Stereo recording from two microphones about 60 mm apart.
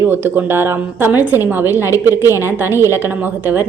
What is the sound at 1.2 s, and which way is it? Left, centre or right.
A woman's voice, right.